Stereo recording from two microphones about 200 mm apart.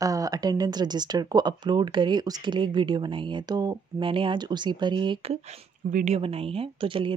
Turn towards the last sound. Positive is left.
turn(degrees=-25)  # may be behind; listen again after turning